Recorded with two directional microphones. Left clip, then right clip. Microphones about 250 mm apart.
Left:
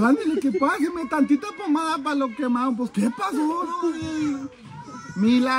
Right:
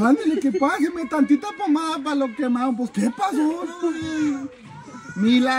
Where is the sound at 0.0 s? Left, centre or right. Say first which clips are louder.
Right 2 dB; centre.